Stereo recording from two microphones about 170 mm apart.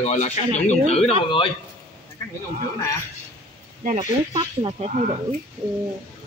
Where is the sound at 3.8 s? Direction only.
50° right (ahead or behind).